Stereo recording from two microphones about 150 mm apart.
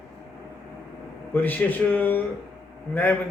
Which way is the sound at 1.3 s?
10° left (ahead or behind).